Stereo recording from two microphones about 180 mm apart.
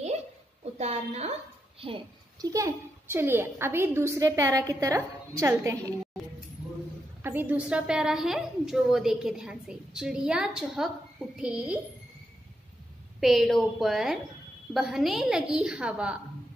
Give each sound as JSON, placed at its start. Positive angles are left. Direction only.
{"t": 0.7, "sound": "a woman's voice", "side_deg": -35}
{"t": 2.5, "sound": "a child's voice", "side_deg": -15}
{"t": 7.2, "sound": "a woman's voice", "side_deg": -10}
{"t": 13.2, "sound": "a woman's voice", "side_deg": 0}